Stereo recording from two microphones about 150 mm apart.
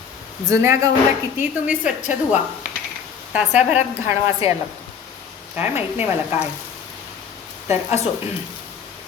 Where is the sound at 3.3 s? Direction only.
10° right (ahead or behind).